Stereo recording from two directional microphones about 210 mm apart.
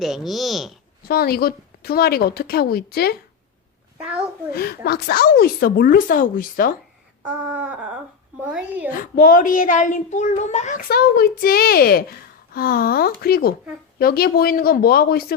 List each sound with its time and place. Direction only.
0.0 s a sound: centre (ahead or behind)
1.0 s a woman's voice: 45° left (ahead or behind)
4.5 s a woman's voice: 45° left (ahead or behind)
7.2 s a sound: 5° right (ahead or behind)
8.4 s a woman's voice: 5° right (ahead or behind)
8.9 s a child's voice: 40° left (ahead or behind)